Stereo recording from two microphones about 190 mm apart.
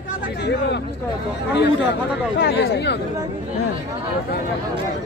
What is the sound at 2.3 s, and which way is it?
Speech, 65° left (ahead or behind).